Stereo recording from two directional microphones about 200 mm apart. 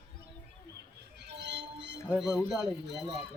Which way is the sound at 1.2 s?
60° right (ahead or behind).